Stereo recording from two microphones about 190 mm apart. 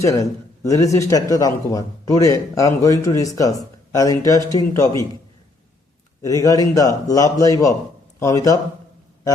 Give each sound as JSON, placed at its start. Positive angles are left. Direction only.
{"t": 0.0, "sound": "speech", "side_deg": 15}
{"t": 6.2, "sound": "speech", "side_deg": 20}